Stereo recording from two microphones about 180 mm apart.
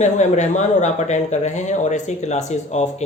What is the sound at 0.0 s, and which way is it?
A man's voice, 40° left (ahead or behind).